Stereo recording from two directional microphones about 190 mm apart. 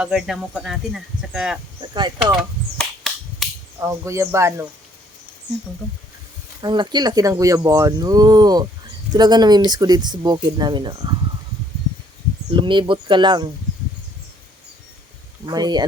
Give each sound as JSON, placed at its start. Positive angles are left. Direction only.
{"t": 0.0, "sound": "speech", "side_deg": -5}
{"t": 1.9, "sound": "speech", "side_deg": -25}
{"t": 2.1, "sound": "a sound", "side_deg": 0}
{"t": 3.8, "sound": "speech", "side_deg": -15}
{"t": 6.6, "sound": "speech", "side_deg": -25}
{"t": 12.5, "sound": "speech", "side_deg": -25}
{"t": 15.4, "sound": "speech", "side_deg": -20}